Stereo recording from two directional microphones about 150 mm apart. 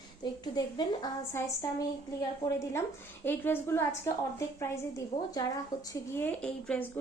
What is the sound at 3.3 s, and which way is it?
A woman's voice, 15° left (ahead or behind).